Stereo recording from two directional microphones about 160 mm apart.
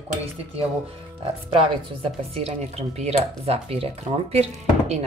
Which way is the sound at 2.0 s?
40° right (ahead or behind).